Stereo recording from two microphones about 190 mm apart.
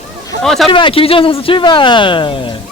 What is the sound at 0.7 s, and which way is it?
Speech, 25° left (ahead or behind).